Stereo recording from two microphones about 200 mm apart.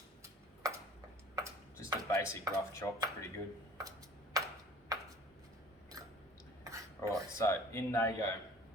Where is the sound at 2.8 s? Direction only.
10° left (ahead or behind).